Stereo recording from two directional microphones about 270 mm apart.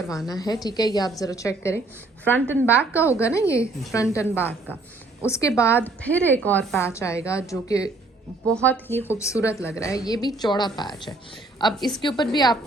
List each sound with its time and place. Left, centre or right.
0.3 s a woman's voice: centre